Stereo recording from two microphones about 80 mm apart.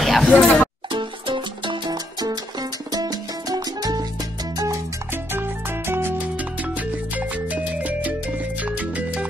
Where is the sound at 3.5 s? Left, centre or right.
Right.